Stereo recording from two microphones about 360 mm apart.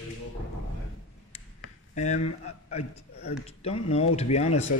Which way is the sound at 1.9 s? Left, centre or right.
Centre.